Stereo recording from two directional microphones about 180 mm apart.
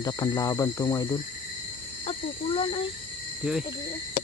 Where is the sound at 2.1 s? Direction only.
30° left (ahead or behind).